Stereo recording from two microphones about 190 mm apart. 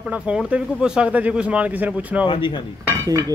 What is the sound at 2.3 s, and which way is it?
Speech, 25° left (ahead or behind).